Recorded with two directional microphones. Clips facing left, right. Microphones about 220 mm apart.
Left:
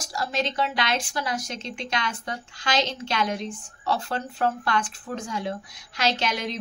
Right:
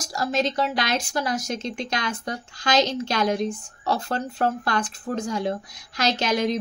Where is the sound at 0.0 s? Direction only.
45° right (ahead or behind).